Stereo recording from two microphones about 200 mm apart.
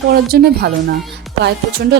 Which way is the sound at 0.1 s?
50° right (ahead or behind).